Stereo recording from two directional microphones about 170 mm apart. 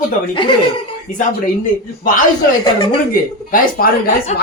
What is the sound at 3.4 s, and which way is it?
Speech, 55° left (ahead or behind).